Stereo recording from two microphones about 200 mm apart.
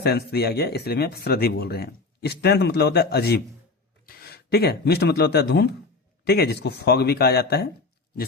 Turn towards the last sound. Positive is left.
turn(degrees=55)  # may be behind; listen again after turning